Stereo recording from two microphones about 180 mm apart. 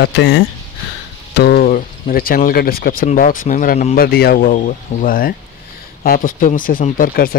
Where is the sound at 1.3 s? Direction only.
65° left (ahead or behind).